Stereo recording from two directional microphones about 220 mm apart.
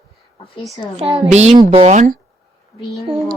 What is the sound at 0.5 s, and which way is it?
Speech, 20° left (ahead or behind).